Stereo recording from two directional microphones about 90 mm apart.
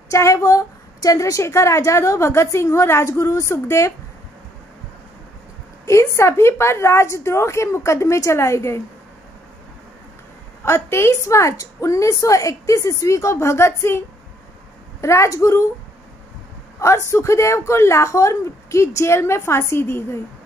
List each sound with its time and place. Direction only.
0.1 s a woman's voice: 35° left (ahead or behind)
5.9 s a woman's voice: 30° left (ahead or behind)
10.6 s a woman's voice: 30° left (ahead or behind)
16.8 s a woman's voice: 30° left (ahead or behind)